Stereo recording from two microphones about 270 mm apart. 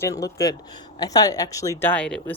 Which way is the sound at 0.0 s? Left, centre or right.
Centre.